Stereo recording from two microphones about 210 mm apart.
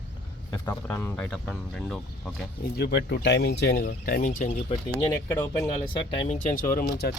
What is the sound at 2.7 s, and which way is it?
Speech, 50° left (ahead or behind).